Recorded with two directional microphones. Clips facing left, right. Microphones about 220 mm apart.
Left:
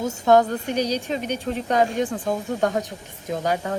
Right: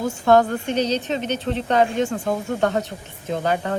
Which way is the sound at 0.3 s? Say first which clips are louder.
Right 1 dB; 15° left (ahead or behind).